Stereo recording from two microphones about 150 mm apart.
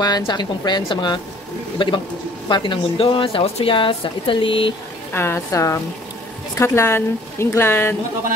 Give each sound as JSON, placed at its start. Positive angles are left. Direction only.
{"t": 0.0, "sound": "a woman's voice", "side_deg": 25}
{"t": 2.4, "sound": "a woman's voice", "side_deg": 30}
{"t": 5.1, "sound": "speech", "side_deg": 15}